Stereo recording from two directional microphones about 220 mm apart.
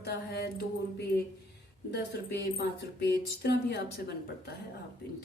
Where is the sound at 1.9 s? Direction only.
50° left (ahead or behind).